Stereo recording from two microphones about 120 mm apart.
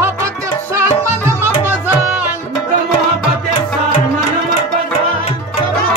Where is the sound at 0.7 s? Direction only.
20° right (ahead or behind).